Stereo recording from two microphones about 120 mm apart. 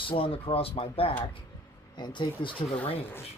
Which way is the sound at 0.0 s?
50° left (ahead or behind).